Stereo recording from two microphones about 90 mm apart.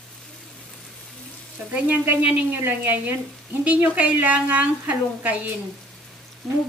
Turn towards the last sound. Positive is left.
turn(degrees=0)  # may be behind; listen again after turning